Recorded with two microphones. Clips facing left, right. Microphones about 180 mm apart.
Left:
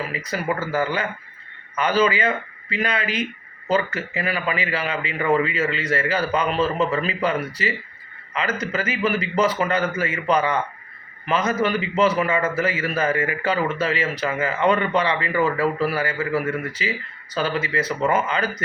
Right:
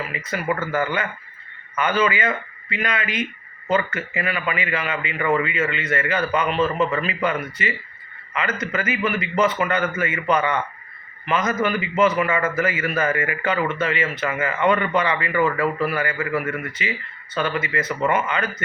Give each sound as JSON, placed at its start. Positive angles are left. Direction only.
{"t": 0.1, "sound": "a man's voice", "side_deg": 35}